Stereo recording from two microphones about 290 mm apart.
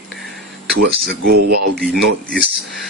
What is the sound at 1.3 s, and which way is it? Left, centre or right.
Speech, right.